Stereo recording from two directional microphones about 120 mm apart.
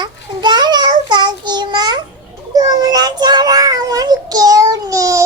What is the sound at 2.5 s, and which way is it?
Child singing, 30° right (ahead or behind).